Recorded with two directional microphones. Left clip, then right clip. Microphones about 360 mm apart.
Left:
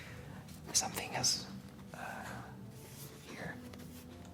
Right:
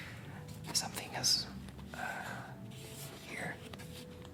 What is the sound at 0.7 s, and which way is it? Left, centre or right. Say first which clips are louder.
Whispering: left 2 dB; centre.